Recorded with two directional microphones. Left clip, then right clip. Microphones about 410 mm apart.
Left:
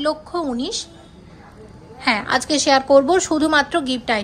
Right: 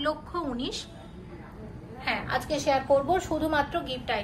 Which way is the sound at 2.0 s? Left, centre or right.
Centre.